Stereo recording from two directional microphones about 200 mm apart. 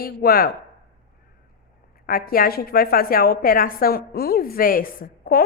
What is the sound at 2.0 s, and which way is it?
A woman's voice, 45° left (ahead or behind).